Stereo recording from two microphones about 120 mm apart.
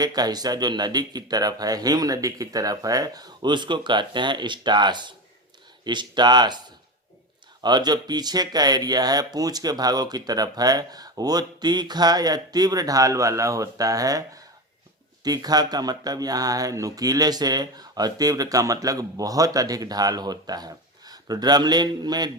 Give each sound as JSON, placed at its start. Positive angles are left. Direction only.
{"t": 0.0, "sound": "speech", "side_deg": -35}
{"t": 7.6, "sound": "speech", "side_deg": -35}